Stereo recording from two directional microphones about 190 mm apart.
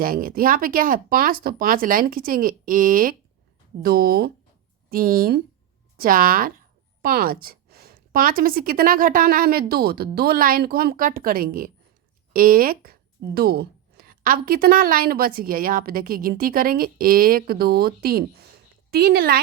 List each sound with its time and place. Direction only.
0.0 s a woman's voice: 50° right (ahead or behind)